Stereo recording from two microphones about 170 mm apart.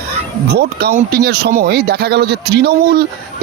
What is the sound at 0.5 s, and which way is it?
Speech, 70° right (ahead or behind).